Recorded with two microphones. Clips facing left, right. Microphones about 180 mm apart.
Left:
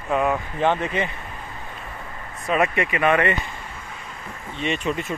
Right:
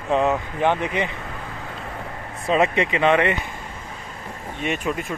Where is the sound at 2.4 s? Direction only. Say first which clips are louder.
Right 2 dB; 25° right (ahead or behind).